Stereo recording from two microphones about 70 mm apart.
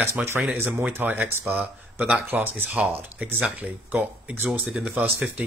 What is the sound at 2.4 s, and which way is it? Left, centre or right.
Speech, right.